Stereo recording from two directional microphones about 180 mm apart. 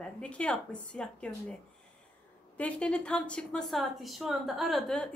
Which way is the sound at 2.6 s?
5° left (ahead or behind).